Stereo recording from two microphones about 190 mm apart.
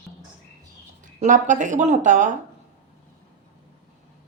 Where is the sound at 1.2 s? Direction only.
40° right (ahead or behind).